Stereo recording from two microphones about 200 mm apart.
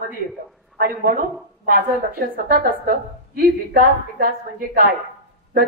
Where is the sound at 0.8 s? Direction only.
45° right (ahead or behind).